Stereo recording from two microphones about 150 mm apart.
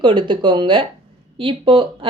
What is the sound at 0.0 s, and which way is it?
Speech, 30° right (ahead or behind).